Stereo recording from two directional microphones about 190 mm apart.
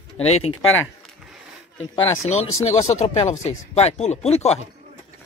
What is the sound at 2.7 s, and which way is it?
Speech, 35° left (ahead or behind).